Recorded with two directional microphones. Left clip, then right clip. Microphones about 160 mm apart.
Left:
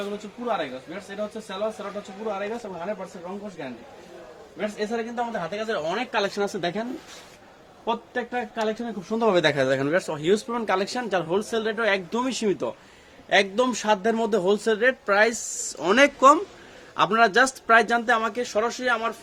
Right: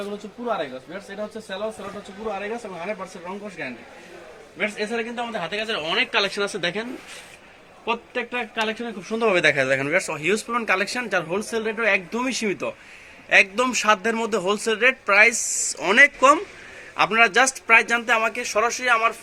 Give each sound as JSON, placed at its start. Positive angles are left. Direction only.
{"t": 0.0, "sound": "speech", "side_deg": 0}
{"t": 4.8, "sound": "speech", "side_deg": 45}
{"t": 5.4, "sound": "speech", "side_deg": 60}
{"t": 7.9, "sound": "speech", "side_deg": 45}
{"t": 9.0, "sound": "speech", "side_deg": 90}
{"t": 13.3, "sound": "a man's voice", "side_deg": 55}